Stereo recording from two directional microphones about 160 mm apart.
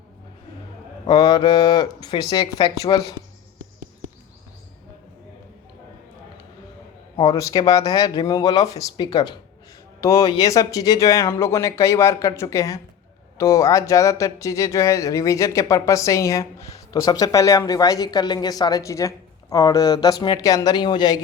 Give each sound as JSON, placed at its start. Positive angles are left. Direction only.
{"t": 1.0, "sound": "speech", "side_deg": 25}
{"t": 7.3, "sound": "speech", "side_deg": 20}